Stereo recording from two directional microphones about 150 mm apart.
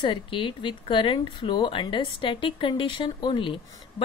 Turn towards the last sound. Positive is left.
turn(degrees=35)  # may be behind; listen again after turning